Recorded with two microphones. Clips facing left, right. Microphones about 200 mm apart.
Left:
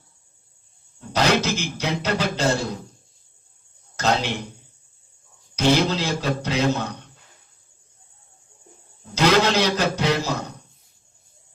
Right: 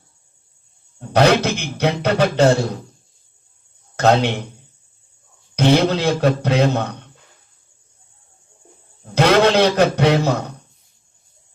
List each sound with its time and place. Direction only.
0.9 s speech: 60° right (ahead or behind)
3.9 s speech: 60° right (ahead or behind)
5.5 s speech: 60° right (ahead or behind)
9.0 s speech: 60° right (ahead or behind)